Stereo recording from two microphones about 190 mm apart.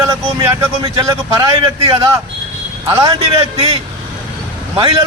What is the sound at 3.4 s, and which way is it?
Speech, 30° right (ahead or behind).